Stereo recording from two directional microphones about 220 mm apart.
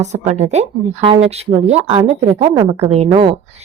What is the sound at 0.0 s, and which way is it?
Speech, 30° right (ahead or behind).